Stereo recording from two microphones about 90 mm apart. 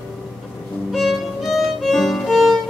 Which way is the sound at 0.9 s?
Centre (ahead or behind).